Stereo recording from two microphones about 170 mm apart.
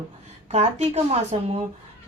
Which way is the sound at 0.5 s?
40° right (ahead or behind).